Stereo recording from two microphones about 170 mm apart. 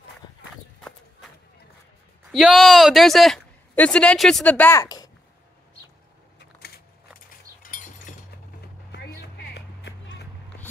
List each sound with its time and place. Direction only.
0.7 s run: 5° left (ahead or behind)
2.3 s speech: centre (ahead or behind)
4.8 s a sound: 25° left (ahead or behind)
7.6 s a sound: 50° left (ahead or behind)
8.5 s vehicle: 70° left (ahead or behind)
9.2 s music: 85° left